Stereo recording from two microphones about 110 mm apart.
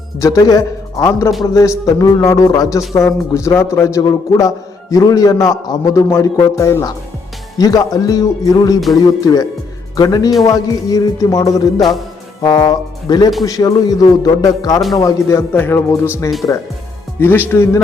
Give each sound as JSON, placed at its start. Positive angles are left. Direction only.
{"t": 0.2, "sound": "a man's voice", "side_deg": 35}
{"t": 16.4, "sound": "a man's voice", "side_deg": 35}
{"t": 17.2, "sound": "a man's voice", "side_deg": 20}